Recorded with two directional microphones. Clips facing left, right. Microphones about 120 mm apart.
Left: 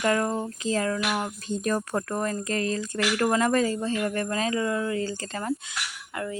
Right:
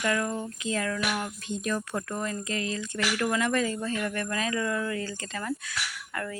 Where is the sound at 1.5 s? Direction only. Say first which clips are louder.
Left 4 dB; 40° left (ahead or behind).